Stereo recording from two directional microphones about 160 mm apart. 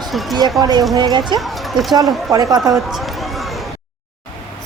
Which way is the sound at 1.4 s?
Centre (ahead or behind).